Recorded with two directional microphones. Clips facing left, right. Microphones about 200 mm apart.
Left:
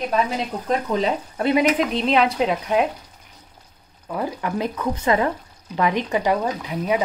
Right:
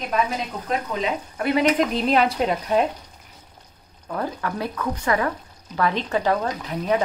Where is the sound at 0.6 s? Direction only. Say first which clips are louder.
Left 4 dB; 35° left (ahead or behind).